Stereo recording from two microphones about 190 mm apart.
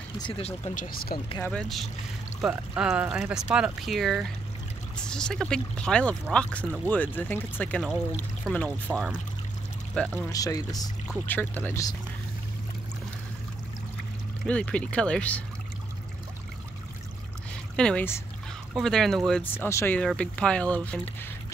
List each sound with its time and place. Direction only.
0.2 s speech: 30° left (ahead or behind)
0.8 s speech: 50° left (ahead or behind)
1.4 s speech: 5° left (ahead or behind)
9.9 s speech: 15° left (ahead or behind)
14.4 s speech: 5° left (ahead or behind)
17.7 s speech: 5° left (ahead or behind)